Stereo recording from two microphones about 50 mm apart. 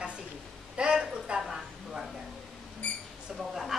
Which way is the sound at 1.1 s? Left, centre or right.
Centre.